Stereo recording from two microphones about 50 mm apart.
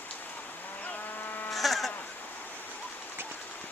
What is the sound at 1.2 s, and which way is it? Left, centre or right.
Vehicle, left.